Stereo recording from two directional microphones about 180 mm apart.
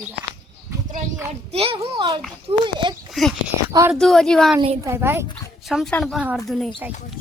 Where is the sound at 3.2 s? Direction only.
Centre (ahead or behind).